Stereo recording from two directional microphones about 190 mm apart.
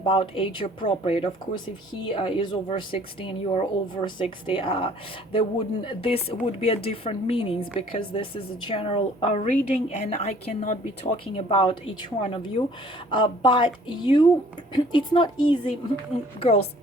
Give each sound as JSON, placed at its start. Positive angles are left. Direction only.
{"t": 0.0, "sound": "a woman's voice", "side_deg": 30}